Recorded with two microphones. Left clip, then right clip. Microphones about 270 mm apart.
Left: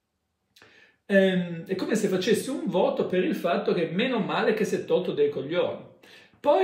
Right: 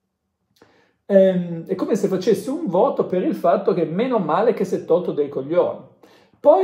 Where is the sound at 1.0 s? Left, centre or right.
Centre.